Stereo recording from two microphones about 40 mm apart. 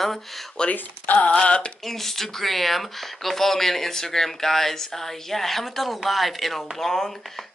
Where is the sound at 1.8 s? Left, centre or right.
Centre.